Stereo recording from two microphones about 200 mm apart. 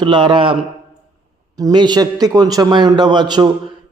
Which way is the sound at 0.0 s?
25° right (ahead or behind).